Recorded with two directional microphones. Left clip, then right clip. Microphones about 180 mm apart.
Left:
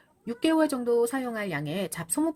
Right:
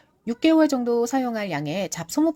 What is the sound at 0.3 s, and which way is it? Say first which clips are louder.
Speech: right 6 dB; 20° right (ahead or behind).